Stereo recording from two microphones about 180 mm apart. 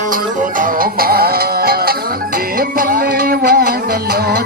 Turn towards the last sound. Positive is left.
turn(degrees=-60)  # may be behind; listen again after turning